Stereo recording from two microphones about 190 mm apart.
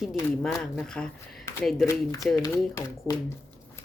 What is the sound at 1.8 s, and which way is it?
Speech, 15° left (ahead or behind).